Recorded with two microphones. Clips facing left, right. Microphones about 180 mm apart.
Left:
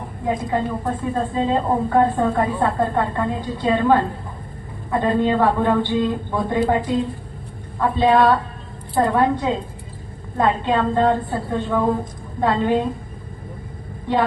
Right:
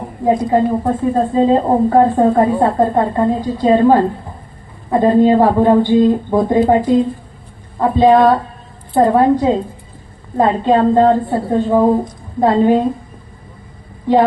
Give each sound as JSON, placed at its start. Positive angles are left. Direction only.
{"t": 0.3, "sound": "a woman's voice", "side_deg": -40}
{"t": 11.3, "sound": "a woman's voice", "side_deg": -30}